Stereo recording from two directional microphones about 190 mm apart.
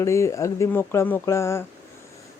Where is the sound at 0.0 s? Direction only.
15° left (ahead or behind).